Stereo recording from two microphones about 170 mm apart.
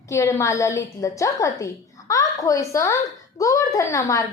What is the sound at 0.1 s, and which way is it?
A woman's voice, 15° left (ahead or behind).